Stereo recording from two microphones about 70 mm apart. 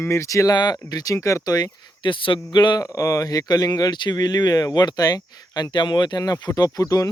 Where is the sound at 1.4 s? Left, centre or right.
Left.